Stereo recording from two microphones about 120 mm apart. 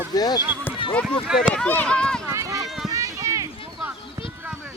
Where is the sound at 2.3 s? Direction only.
25° right (ahead or behind).